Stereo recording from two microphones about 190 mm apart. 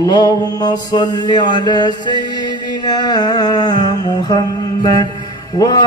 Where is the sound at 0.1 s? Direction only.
20° left (ahead or behind).